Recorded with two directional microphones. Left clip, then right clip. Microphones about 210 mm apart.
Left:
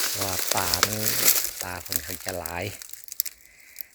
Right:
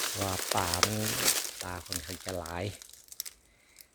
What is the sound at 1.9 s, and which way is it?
Frying, 50° left (ahead or behind).